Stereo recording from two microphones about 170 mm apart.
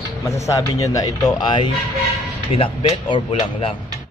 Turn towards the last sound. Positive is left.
turn(degrees=30)  # may be behind; listen again after turning